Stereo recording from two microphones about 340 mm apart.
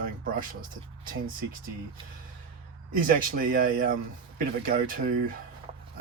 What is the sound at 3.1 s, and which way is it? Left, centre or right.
Speech, right.